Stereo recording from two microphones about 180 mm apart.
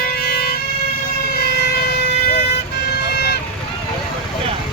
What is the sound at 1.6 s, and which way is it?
Emergency vehicle, 65° left (ahead or behind).